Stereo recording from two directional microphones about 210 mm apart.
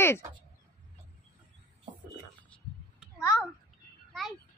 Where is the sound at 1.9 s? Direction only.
20° right (ahead or behind).